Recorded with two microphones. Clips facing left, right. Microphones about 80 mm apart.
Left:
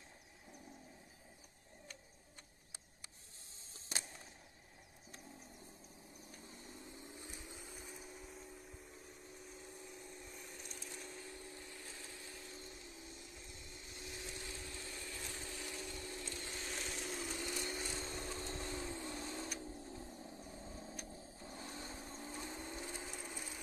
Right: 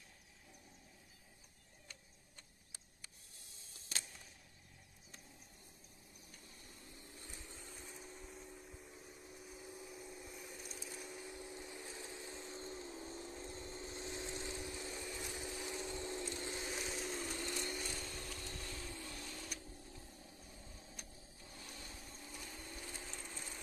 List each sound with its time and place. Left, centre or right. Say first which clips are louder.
6.4 s vehicle: left 6 dB; left; by 16.6 s right
16.6 s sewing machine: right 2 dB; centre
17.6 s a sound: left 1 dB; centre
19.6 s vehicle: left 7 dB; left; by 23.6 s centre